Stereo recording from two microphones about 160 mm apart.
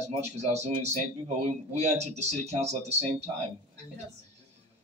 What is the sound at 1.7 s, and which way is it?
Speech, 45° right (ahead or behind).